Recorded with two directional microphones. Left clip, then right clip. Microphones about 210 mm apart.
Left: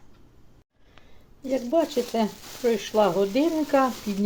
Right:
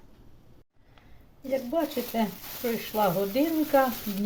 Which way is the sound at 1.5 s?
40° left (ahead or behind).